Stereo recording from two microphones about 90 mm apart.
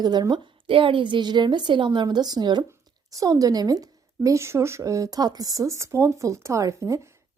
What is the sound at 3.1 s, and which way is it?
A woman's voice, 40° right (ahead or behind).